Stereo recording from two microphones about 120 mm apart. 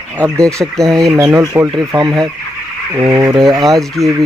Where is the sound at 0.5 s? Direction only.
30° right (ahead or behind).